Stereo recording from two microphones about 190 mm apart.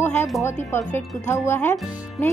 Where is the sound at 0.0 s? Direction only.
10° left (ahead or behind).